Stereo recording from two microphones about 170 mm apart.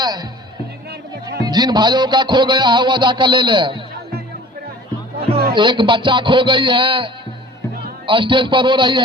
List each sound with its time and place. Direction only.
0.0 s a man's voice: 25° right (ahead or behind)
1.5 s a man's voice: 25° right (ahead or behind)
5.5 s a man's voice: 30° right (ahead or behind)